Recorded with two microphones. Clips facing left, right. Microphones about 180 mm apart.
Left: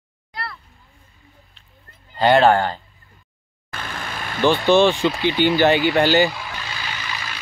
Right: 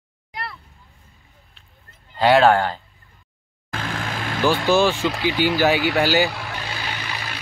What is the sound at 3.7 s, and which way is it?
Vehicle, 90° right.